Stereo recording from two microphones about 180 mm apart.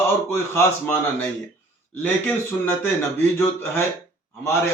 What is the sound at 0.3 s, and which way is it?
A man's voice, 15° left (ahead or behind).